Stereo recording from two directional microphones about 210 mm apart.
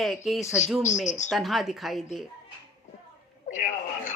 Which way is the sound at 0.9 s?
35° left (ahead or behind).